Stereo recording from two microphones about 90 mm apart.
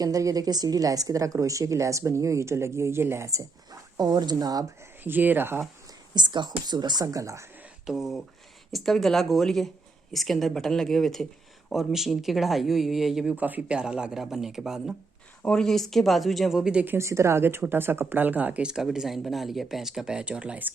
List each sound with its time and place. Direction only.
0.0 s a woman's voice: 40° right (ahead or behind)
5.0 s speech: 20° right (ahead or behind)
6.1 s speech: 55° right (ahead or behind); by 7.4 s 35° right (ahead or behind)
7.9 s speech: 5° right (ahead or behind)
13.3 s speech: 20° right (ahead or behind)
15.4 s speech: 5° left (ahead or behind)
16.8 s speech: 25° right (ahead or behind)